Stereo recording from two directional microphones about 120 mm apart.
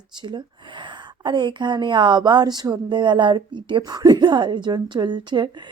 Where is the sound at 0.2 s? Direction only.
40° right (ahead or behind).